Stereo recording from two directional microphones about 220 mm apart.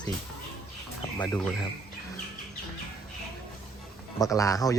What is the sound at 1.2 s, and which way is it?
Speech, 5° left (ahead or behind).